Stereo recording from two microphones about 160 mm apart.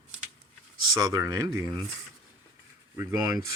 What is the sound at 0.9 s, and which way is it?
Speech, 20° right (ahead or behind).